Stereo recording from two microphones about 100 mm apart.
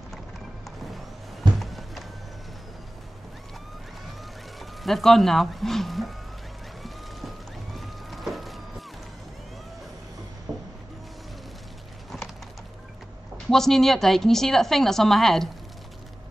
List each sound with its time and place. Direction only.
1.6 s music: centre (ahead or behind)
4.8 s a woman's voice: centre (ahead or behind)
6.8 s a sound: centre (ahead or behind)
10.5 s music: 40° right (ahead or behind)
13.5 s a woman's voice: 5° left (ahead or behind)